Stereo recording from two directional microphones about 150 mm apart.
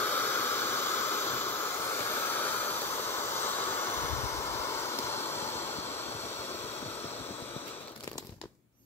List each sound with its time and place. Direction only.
0.0 s hiss: 15° left (ahead or behind)